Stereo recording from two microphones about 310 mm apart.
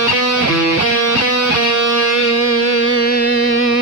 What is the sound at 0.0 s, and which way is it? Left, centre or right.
Music, left.